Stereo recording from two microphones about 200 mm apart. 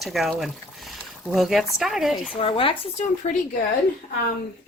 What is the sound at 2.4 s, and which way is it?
Speech, 25° left (ahead or behind).